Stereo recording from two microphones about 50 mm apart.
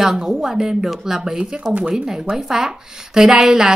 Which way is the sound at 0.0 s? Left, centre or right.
Centre.